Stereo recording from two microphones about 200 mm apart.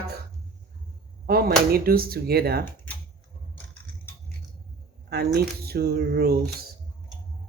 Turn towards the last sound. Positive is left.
turn(degrees=-50)  # may be behind; listen again after turning